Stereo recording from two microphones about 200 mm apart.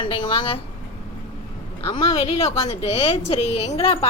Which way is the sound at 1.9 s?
30° left (ahead or behind).